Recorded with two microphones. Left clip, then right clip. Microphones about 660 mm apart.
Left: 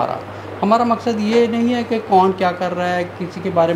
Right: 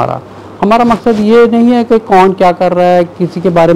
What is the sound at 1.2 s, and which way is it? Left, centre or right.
Speech, right.